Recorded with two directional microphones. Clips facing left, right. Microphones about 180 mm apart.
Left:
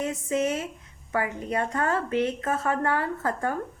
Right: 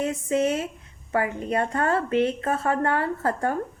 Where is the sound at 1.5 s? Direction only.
35° right (ahead or behind).